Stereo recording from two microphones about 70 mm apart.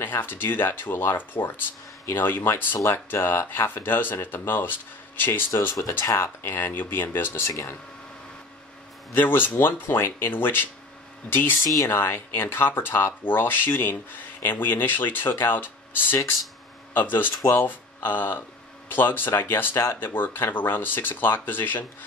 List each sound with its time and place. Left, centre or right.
0.0 s speech: left
5.8 s speech: left
7.4 s speech: left
9.1 s speech: left